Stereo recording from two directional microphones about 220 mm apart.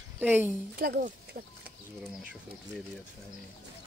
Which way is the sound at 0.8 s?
45° right (ahead or behind).